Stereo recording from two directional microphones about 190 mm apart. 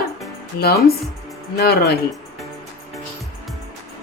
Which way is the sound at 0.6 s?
55° left (ahead or behind).